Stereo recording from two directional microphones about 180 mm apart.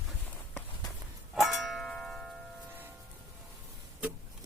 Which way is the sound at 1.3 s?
Centre (ahead or behind).